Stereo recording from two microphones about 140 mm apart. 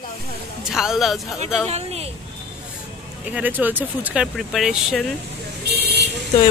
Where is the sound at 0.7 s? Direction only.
5° right (ahead or behind).